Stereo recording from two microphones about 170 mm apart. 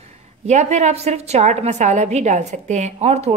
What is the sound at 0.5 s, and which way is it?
A woman's voice, 40° right (ahead or behind).